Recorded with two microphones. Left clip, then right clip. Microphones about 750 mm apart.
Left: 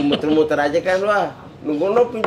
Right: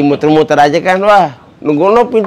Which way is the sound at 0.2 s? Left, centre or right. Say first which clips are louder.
Right 11 dB; right.